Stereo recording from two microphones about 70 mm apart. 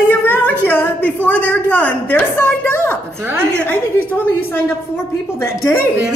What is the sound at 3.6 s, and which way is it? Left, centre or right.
Speech, left.